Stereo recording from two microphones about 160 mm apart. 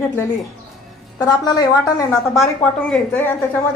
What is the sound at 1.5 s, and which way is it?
Speech, 25° left (ahead or behind).